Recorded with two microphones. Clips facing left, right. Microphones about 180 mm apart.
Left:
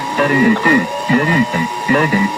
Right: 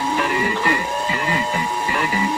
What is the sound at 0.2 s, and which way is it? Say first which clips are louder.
Speech: left 9 dB; 70° left (ahead or behind).